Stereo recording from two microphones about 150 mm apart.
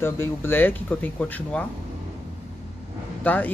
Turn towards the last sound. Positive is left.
turn(degrees=10)  # may be behind; listen again after turning